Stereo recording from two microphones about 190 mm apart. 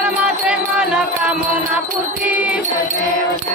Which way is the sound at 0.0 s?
5° right (ahead or behind).